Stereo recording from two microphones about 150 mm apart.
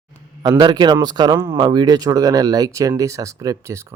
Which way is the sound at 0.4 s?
30° right (ahead or behind).